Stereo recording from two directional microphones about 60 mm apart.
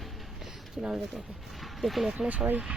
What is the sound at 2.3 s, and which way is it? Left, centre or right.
Speech, right.